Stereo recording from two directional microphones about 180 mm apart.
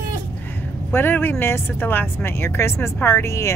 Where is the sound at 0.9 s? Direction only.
10° left (ahead or behind).